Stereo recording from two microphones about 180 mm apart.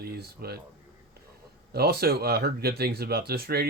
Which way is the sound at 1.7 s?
60° right (ahead or behind).